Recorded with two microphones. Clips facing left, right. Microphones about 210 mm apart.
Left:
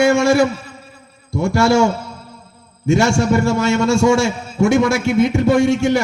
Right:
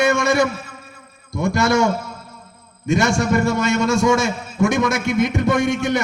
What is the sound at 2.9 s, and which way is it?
A man's voice, 25° left (ahead or behind).